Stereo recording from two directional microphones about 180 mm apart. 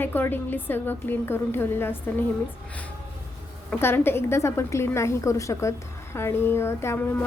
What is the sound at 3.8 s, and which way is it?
A woman's voice, 10° left (ahead or behind).